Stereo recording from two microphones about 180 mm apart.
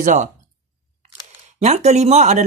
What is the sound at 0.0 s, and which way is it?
Speech, 45° right (ahead or behind).